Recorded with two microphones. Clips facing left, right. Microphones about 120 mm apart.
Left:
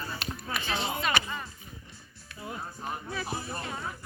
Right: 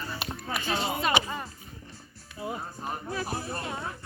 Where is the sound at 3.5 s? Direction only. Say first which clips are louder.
Right 2 dB; 5° right (ahead or behind).